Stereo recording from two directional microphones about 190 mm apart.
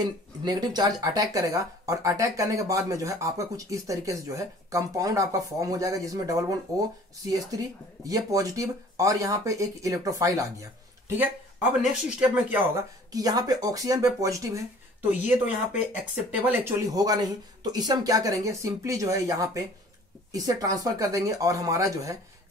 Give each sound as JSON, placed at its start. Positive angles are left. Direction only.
{"t": 0.0, "sound": "speech", "side_deg": -20}
{"t": 11.9, "sound": "speech", "side_deg": -5}
{"t": 13.1, "sound": "speech", "side_deg": -20}